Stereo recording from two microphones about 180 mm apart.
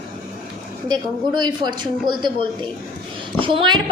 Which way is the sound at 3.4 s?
30° right (ahead or behind).